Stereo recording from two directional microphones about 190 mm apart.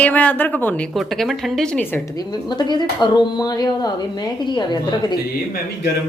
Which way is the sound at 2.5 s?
25° left (ahead or behind).